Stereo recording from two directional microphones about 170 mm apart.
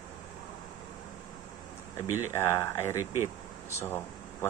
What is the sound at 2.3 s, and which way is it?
Speech, 15° left (ahead or behind).